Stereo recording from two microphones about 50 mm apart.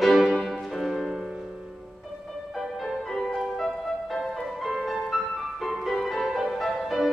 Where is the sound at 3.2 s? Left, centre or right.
Centre.